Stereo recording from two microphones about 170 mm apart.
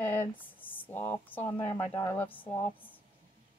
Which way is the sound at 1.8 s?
15° left (ahead or behind).